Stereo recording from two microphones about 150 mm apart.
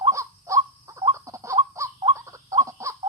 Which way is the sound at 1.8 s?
20° right (ahead or behind).